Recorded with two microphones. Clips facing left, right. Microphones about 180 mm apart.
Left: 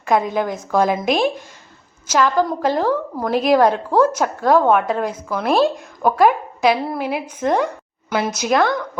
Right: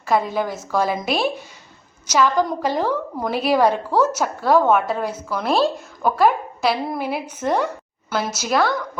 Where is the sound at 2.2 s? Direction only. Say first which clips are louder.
Left 1 dB; 5° left (ahead or behind).